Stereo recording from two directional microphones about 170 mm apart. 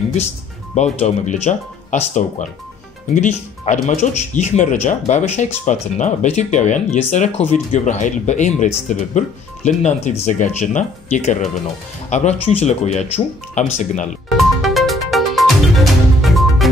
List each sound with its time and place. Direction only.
0.7 s speech: 40° left (ahead or behind)
3.2 s speech: 45° left (ahead or behind)
14.3 s music: centre (ahead or behind)